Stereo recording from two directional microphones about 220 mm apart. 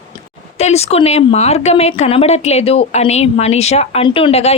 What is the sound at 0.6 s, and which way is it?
A woman's voice, 30° left (ahead or behind).